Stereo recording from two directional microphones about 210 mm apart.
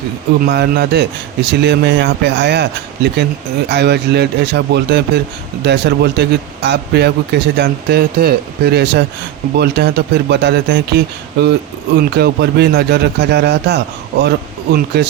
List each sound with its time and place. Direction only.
0.4 s speech: 50° right (ahead or behind)